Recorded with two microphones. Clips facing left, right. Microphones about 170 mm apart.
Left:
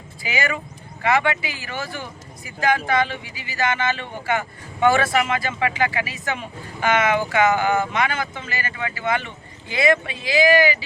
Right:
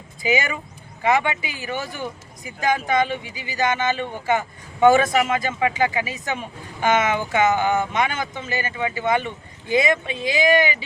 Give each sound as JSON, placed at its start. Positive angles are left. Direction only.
{"t": 1.0, "sound": "speech", "side_deg": -15}